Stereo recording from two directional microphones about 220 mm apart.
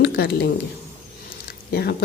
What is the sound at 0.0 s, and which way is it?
Speech, 45° left (ahead or behind).